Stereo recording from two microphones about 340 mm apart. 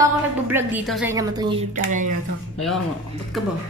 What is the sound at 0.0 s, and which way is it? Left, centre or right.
A woman's voice, centre.